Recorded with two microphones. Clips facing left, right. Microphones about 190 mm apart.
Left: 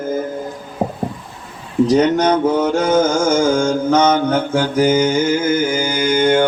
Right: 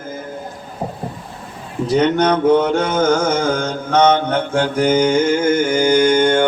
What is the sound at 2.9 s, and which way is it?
Mantra, 60° right (ahead or behind).